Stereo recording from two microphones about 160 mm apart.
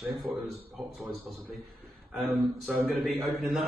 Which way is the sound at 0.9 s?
Centre (ahead or behind).